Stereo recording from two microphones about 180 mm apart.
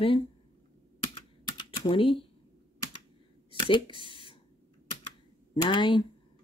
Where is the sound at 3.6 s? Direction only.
25° left (ahead or behind).